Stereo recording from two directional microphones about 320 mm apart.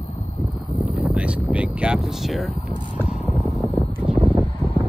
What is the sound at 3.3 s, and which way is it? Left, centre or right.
Vehicle, centre.